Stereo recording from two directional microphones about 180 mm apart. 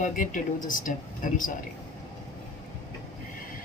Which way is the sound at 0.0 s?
45° left (ahead or behind).